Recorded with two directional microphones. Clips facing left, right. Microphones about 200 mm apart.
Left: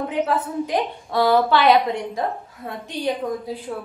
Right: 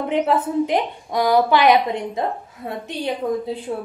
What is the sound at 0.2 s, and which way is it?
A woman's voice, 15° right (ahead or behind).